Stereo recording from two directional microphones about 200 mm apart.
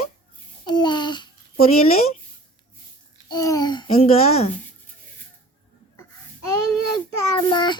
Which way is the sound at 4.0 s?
30° left (ahead or behind).